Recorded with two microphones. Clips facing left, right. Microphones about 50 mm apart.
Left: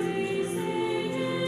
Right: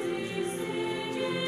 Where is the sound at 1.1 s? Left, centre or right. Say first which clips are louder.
Left 2 dB; right.